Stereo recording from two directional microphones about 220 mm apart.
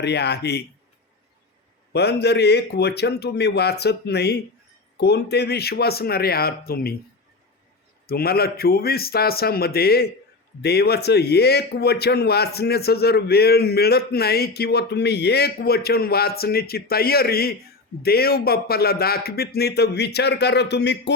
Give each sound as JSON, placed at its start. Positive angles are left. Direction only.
{"t": 0.0, "sound": "speech", "side_deg": 50}
{"t": 1.9, "sound": "speech", "side_deg": 50}
{"t": 8.0, "sound": "speech", "side_deg": 45}